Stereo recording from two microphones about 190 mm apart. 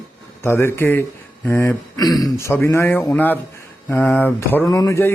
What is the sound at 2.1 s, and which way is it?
Speech, centre (ahead or behind).